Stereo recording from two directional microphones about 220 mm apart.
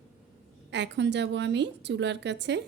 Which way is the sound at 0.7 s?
50° right (ahead or behind).